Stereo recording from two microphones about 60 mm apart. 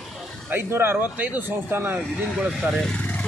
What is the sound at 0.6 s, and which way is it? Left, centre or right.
Speech, right.